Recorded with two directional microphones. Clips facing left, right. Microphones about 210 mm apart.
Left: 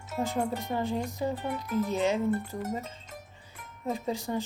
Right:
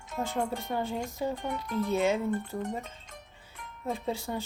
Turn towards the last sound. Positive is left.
turn(degrees=10)  # may be behind; listen again after turning